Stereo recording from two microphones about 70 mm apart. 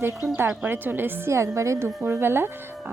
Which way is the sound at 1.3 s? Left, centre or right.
Right.